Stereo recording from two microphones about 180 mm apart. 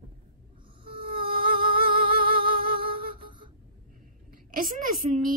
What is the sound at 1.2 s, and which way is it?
Music, 55° right (ahead or behind).